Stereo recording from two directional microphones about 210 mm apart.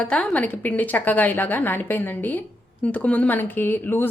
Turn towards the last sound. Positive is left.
turn(degrees=10)  # may be behind; listen again after turning